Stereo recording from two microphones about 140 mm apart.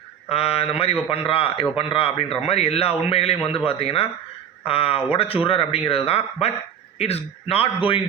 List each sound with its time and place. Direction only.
0.3 s a man's voice: 45° left (ahead or behind)